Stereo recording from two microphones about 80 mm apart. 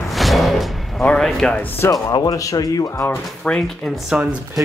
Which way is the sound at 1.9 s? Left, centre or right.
Left.